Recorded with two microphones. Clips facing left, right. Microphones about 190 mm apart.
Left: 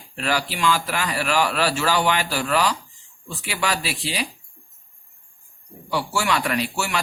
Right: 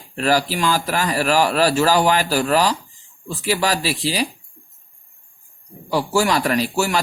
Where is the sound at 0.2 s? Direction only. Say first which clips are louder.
Right 5 dB; 40° right (ahead or behind).